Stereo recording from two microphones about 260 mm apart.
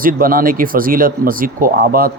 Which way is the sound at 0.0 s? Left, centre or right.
Right.